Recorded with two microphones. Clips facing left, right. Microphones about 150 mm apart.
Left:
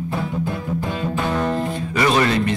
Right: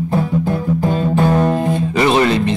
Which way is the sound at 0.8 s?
40° right (ahead or behind).